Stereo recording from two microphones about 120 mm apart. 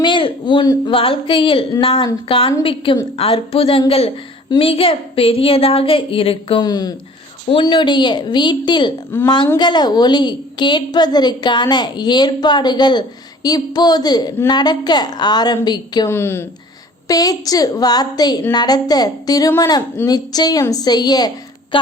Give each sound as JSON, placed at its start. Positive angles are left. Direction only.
{"t": 0.0, "sound": "a woman's voice", "side_deg": 45}
{"t": 6.7, "sound": "a woman's voice", "side_deg": 35}
{"t": 9.1, "sound": "a woman's voice", "side_deg": 20}
{"t": 9.6, "sound": "a woman's voice", "side_deg": 35}
{"t": 16.0, "sound": "a woman's voice", "side_deg": 20}
{"t": 17.1, "sound": "a woman's voice", "side_deg": 30}